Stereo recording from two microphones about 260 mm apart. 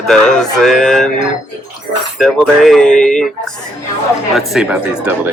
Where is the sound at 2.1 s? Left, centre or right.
Centre.